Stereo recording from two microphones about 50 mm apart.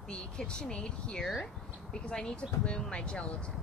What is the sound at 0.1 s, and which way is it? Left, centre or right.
Speech, centre.